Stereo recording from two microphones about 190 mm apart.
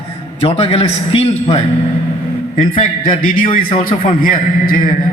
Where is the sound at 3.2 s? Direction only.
45° left (ahead or behind).